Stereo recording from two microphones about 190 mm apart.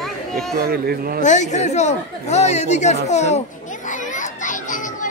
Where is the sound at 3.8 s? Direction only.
40° left (ahead or behind).